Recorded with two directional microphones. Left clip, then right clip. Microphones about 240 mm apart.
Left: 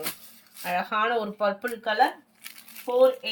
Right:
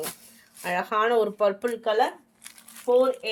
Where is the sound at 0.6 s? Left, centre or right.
Right.